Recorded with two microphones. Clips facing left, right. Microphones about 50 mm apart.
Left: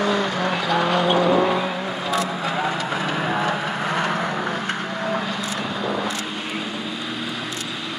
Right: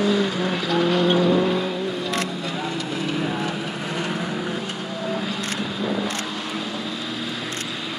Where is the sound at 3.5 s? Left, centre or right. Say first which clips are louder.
Left 5 dB; left.